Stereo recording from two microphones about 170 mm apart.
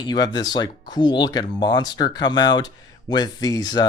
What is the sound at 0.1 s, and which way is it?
Speech, 25° left (ahead or behind).